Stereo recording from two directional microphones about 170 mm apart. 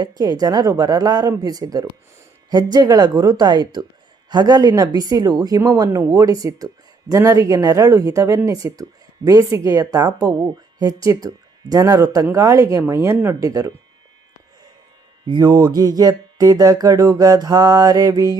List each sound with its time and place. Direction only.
0.0 s speech: 25° right (ahead or behind)
15.3 s speech: 25° right (ahead or behind)